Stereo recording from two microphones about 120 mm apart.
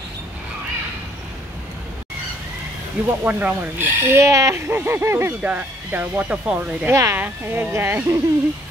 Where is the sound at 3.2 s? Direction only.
15° right (ahead or behind).